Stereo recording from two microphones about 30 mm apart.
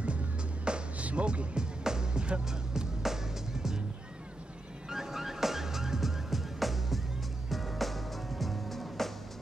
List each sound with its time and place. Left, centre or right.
0.9 s music: right
1.2 s speech: right
1.9 s music: right
2.7 s music: centre
4.8 s music: centre